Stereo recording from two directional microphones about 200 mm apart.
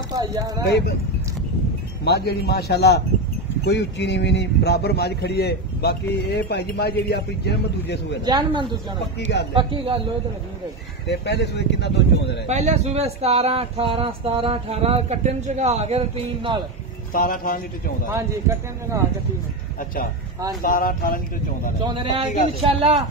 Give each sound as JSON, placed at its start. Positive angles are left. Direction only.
{"t": 0.1, "sound": "speech", "side_deg": -15}
{"t": 2.0, "sound": "speech", "side_deg": 55}
{"t": 8.3, "sound": "speech", "side_deg": -25}
{"t": 11.1, "sound": "speech", "side_deg": 55}
{"t": 12.4, "sound": "speech", "side_deg": -35}
{"t": 17.1, "sound": "a man's voice", "side_deg": 45}
{"t": 18.3, "sound": "speech", "side_deg": -15}
{"t": 20.6, "sound": "a man's voice", "side_deg": 45}
{"t": 21.8, "sound": "speech", "side_deg": -25}